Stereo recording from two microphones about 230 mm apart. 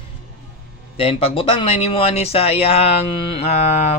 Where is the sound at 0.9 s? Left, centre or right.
Left.